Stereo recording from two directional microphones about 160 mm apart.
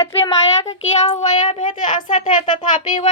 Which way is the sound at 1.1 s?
50° left (ahead or behind).